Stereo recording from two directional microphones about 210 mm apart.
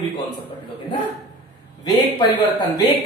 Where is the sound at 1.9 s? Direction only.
20° left (ahead or behind).